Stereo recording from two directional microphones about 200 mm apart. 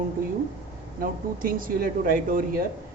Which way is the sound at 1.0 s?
45° right (ahead or behind).